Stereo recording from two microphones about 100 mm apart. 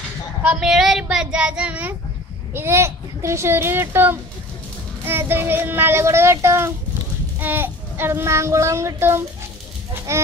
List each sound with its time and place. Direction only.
0.4 s a child's voice: 10° right (ahead or behind); by 10.2 s 30° right (ahead or behind)